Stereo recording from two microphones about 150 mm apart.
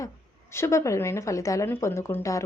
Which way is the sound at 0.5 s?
20° left (ahead or behind).